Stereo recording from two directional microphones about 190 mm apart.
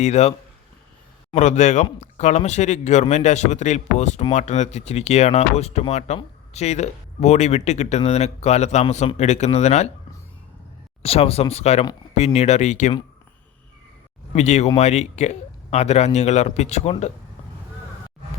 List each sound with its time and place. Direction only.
0.0 s speech: 35° left (ahead or behind)
11.0 s speech: 30° left (ahead or behind)
14.3 s speech: 35° left (ahead or behind)